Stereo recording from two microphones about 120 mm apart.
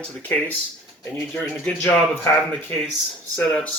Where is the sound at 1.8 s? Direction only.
20° left (ahead or behind).